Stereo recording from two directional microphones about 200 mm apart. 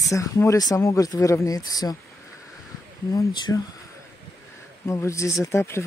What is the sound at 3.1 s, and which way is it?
Speech, 20° left (ahead or behind).